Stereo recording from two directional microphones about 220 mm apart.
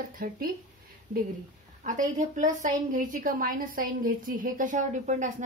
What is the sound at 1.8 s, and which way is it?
A woman's voice, 35° right (ahead or behind).